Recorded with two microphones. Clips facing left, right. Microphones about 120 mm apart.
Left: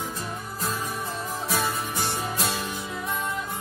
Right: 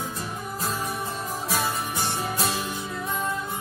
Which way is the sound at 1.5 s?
15° right (ahead or behind).